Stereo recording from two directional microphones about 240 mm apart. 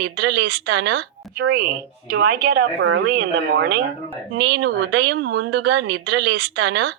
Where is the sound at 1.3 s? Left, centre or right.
Right.